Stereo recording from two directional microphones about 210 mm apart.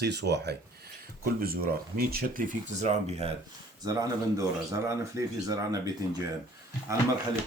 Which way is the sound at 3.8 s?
15° right (ahead or behind).